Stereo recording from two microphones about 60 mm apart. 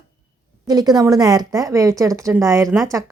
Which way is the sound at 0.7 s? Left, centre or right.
Right.